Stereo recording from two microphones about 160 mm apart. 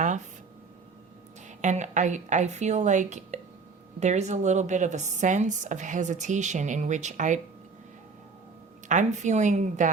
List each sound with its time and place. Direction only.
1.5 s speech: 50° right (ahead or behind)
8.9 s speech: 50° right (ahead or behind)